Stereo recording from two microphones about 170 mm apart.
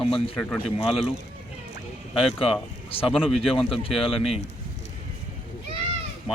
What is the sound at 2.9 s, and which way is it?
Speech, 35° left (ahead or behind).